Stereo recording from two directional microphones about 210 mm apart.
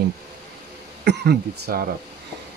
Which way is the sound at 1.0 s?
50° right (ahead or behind).